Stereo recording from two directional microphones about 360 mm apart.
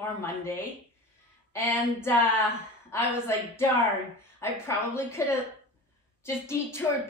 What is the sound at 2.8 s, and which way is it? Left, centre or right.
A woman's voice, centre.